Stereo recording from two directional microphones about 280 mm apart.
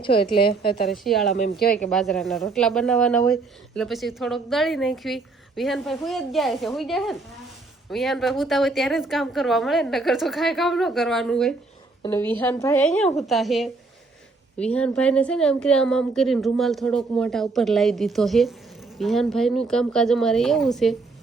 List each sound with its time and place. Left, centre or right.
0.2 s a woman's voice: centre
0.6 s a woman's voice: left
0.9 s speech: centre
1.5 s a woman's voice: left
1.9 s speech: centre